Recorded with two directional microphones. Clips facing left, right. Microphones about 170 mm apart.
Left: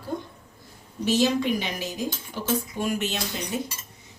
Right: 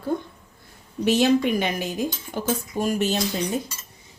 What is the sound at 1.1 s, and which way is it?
Speech, 60° right (ahead or behind).